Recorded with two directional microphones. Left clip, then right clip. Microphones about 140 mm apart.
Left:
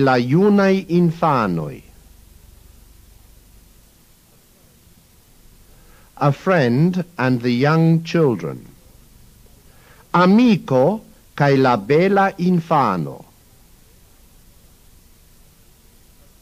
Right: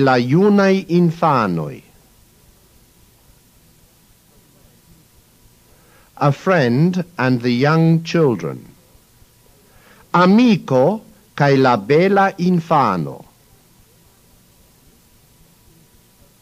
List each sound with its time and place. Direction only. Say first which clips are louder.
0.0 s speech: right 1 dB; 30° right (ahead or behind)
6.1 s speech: right 1 dB; 30° right (ahead or behind)
9.8 s speech: right 1 dB; 35° right (ahead or behind)